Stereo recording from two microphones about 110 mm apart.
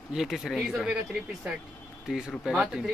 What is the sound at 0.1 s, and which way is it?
Speech, centre (ahead or behind).